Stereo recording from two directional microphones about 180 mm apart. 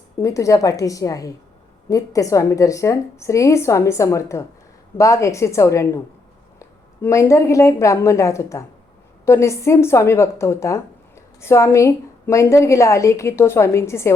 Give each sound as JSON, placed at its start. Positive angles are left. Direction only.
{"t": 0.2, "sound": "a woman's voice", "side_deg": 15}